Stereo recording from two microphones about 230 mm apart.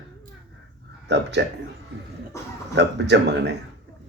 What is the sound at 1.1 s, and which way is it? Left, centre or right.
Speech, right.